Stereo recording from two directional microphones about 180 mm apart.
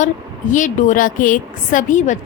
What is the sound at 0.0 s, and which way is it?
A woman's voice, 45° left (ahead or behind).